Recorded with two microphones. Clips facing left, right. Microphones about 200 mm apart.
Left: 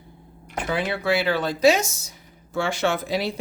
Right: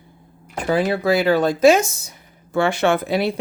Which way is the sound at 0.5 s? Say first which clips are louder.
Right 6 dB; 40° right (ahead or behind).